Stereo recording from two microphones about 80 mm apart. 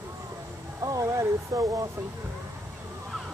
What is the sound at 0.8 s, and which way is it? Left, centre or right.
Speech, right.